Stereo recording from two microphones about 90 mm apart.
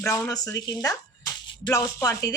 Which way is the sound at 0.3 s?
40° left (ahead or behind).